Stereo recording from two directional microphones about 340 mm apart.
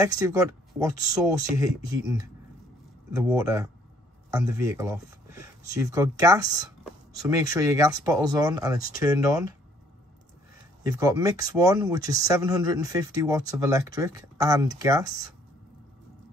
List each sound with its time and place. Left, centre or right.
0.0 s speech: centre
10.8 s speech: centre